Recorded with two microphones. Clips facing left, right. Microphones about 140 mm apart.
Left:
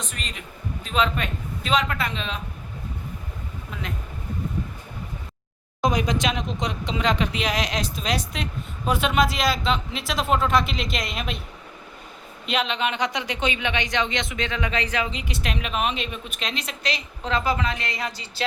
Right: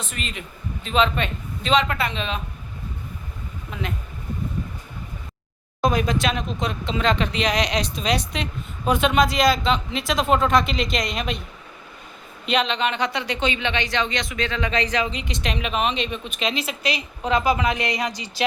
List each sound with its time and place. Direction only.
0.0 s a man's voice: centre (ahead or behind)
5.8 s speech: 15° left (ahead or behind)
12.5 s speech: 5° left (ahead or behind); by 18.4 s 15° right (ahead or behind)